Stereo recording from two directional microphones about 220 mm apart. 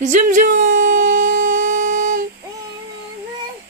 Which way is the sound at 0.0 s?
35° right (ahead or behind).